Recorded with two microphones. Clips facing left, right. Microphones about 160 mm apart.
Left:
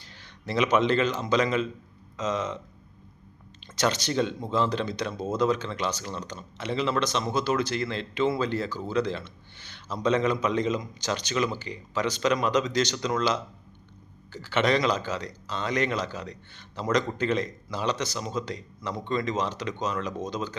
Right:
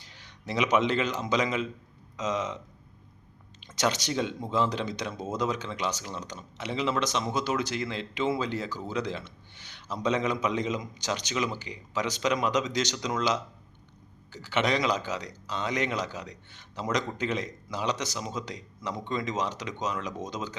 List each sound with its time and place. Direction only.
0.1 s speech: 15° right (ahead or behind)
3.8 s speech: 15° right (ahead or behind)